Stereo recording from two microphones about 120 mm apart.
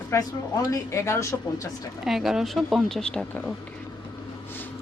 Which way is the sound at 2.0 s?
Centre (ahead or behind).